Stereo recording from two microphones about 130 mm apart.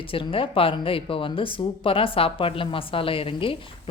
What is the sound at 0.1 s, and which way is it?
Speech, 45° left (ahead or behind).